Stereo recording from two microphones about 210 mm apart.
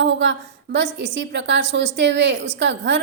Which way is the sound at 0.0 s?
55° right (ahead or behind).